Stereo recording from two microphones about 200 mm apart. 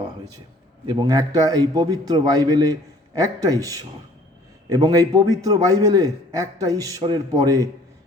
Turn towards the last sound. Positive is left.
turn(degrees=-20)  # may be behind; listen again after turning